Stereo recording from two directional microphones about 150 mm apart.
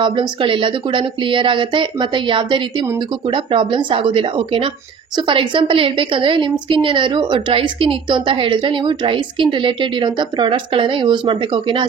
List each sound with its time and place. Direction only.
0.0 s a woman's voice: 35° right (ahead or behind)